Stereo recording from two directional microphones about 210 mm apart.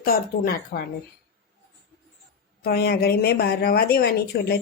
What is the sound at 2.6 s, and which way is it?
Speech, 50° left (ahead or behind).